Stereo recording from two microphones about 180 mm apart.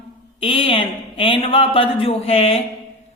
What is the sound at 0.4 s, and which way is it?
Speech, 30° left (ahead or behind).